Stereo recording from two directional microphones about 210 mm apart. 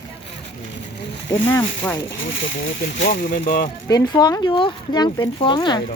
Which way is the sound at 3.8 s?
15° left (ahead or behind).